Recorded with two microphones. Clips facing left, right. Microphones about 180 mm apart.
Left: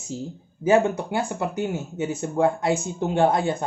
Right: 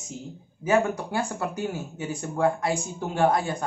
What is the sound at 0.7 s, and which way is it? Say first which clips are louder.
Speech: left 4 dB; 20° left (ahead or behind).